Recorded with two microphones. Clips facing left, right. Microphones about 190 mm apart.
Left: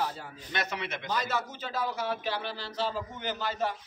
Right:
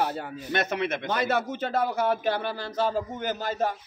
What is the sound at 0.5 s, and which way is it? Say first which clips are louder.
A man's voice: right 7 dB; 55° right (ahead or behind).